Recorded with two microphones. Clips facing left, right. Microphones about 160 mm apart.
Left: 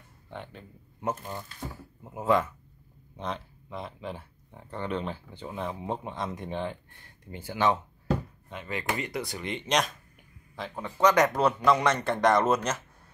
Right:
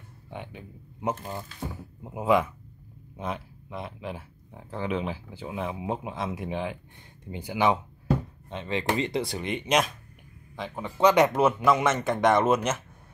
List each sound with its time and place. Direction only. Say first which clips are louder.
0.3 s speech: right 2 dB; 10° right (ahead or behind)
7.0 s speech: right 4 dB; 15° right (ahead or behind)
8.5 s a man's voice: right 5 dB; 25° right (ahead or behind); by 10.8 s centre (ahead or behind)
10.8 s speech: right 2 dB; 10° right (ahead or behind)